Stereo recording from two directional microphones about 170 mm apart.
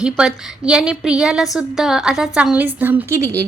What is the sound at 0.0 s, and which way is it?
A woman's voice, 5° right (ahead or behind).